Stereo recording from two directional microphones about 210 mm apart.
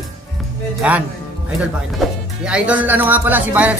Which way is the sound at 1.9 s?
5° right (ahead or behind).